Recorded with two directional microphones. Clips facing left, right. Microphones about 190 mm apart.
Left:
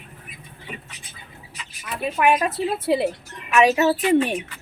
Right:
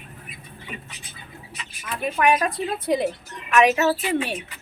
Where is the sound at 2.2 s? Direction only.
5° left (ahead or behind).